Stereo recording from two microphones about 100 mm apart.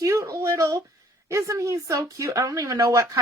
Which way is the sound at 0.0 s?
35° right (ahead or behind).